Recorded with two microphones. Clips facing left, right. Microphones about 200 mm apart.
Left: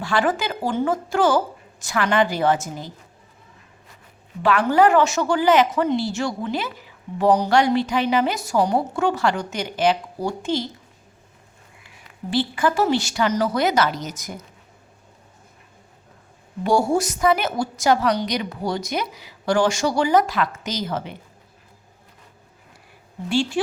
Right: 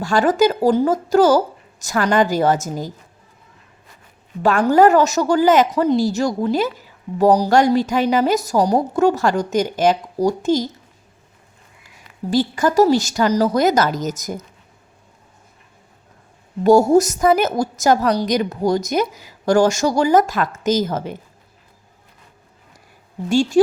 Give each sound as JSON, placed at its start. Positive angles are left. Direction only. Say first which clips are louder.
{"t": 0.0, "sound": "a woman's voice", "louder": "right 7 dB", "side_deg": -45}
{"t": 4.7, "sound": "a woman's voice", "louder": "right 4 dB", "side_deg": -40}
{"t": 12.3, "sound": "a woman's voice", "louder": "right 4 dB", "side_deg": -40}
{"t": 16.6, "sound": "a woman's voice", "louder": "right 7 dB", "side_deg": -40}
{"t": 23.3, "sound": "a woman's voice", "louder": "right 5 dB", "side_deg": -45}